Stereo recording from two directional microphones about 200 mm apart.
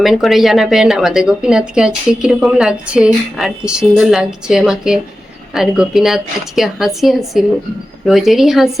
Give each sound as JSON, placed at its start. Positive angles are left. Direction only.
{"t": 0.0, "sound": "speech", "side_deg": 0}